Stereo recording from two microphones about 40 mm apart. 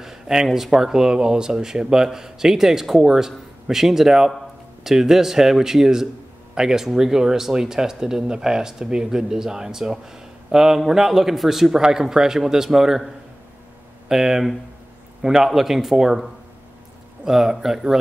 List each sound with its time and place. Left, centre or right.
0.0 s a sound: centre
0.7 s speech: centre
14.0 s speech: centre
17.2 s speech: centre